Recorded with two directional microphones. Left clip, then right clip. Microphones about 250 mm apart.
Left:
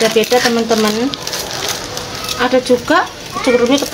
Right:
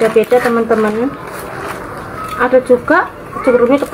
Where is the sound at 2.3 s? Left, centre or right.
Left.